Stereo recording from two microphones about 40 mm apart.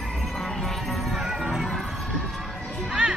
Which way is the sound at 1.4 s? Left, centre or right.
Centre.